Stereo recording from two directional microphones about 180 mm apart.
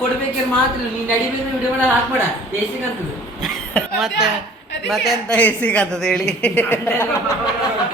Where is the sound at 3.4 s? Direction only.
Centre (ahead or behind).